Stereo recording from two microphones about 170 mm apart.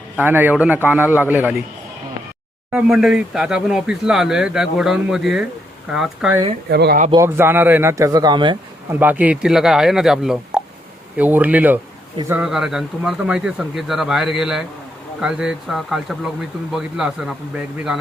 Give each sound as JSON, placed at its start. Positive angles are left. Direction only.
{"t": 0.2, "sound": "a man's voice", "side_deg": -10}
{"t": 2.7, "sound": "speech", "side_deg": 0}
{"t": 6.7, "sound": "speech", "side_deg": -70}
{"t": 7.1, "sound": "speech", "side_deg": -15}
{"t": 8.9, "sound": "a man's voice", "side_deg": -10}